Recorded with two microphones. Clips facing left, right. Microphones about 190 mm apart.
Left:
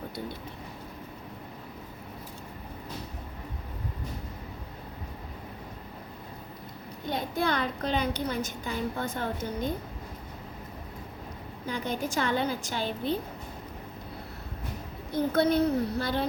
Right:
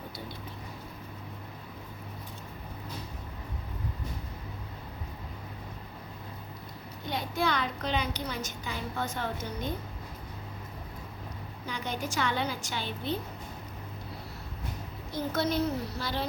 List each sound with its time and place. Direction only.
7.2 s a woman's voice: 50° left (ahead or behind)
11.7 s a woman's voice: 50° left (ahead or behind)
15.1 s a woman's voice: 60° left (ahead or behind)